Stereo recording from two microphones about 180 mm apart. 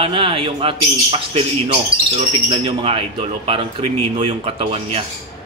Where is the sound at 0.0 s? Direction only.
30° right (ahead or behind).